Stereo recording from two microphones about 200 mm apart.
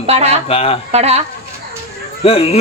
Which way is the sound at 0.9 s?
30° right (ahead or behind).